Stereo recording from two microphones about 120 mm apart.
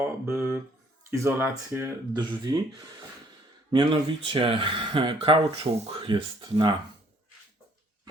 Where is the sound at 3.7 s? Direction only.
45° right (ahead or behind).